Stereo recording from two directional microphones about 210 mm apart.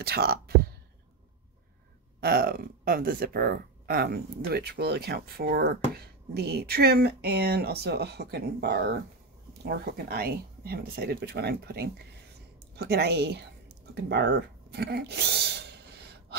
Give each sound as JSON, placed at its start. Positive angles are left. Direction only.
{"t": 0.0, "sound": "speech", "side_deg": -50}
{"t": 2.1, "sound": "speech", "side_deg": -45}
{"t": 13.9, "sound": "a sound", "side_deg": -55}